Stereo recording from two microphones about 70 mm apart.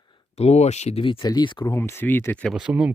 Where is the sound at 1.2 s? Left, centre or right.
Left.